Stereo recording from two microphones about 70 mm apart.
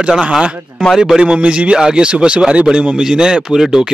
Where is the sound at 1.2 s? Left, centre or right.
Centre.